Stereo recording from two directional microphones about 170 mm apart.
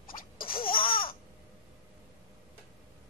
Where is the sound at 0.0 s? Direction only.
55° left (ahead or behind).